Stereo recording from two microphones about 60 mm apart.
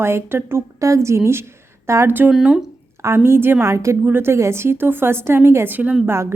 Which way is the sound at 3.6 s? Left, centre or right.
Right.